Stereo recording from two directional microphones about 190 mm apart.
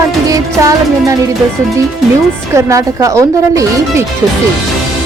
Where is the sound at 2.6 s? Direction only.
15° right (ahead or behind).